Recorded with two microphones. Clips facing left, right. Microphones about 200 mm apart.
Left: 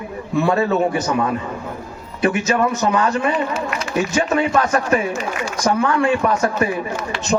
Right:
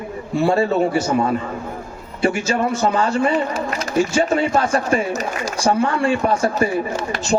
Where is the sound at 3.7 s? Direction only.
35° right (ahead or behind).